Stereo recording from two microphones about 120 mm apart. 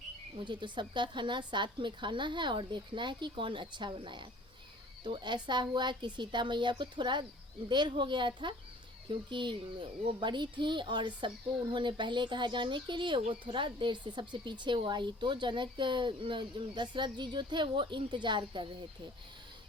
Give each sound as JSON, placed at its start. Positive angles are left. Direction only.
{"t": 0.3, "sound": "speech", "side_deg": -40}